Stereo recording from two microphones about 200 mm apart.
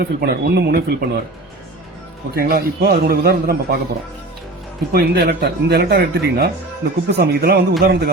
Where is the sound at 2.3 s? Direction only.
50° right (ahead or behind).